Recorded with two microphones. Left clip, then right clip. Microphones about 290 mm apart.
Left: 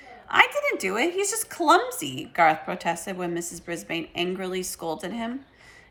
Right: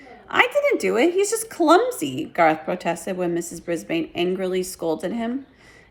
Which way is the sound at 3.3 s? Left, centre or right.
Left.